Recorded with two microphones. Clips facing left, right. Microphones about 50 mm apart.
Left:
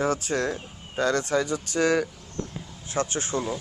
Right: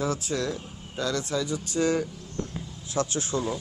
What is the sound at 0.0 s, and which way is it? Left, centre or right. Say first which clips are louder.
Speech: left 3 dB; left.